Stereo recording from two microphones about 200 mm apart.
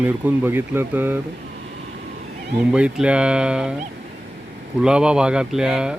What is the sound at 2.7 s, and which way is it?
Speech, 5° right (ahead or behind).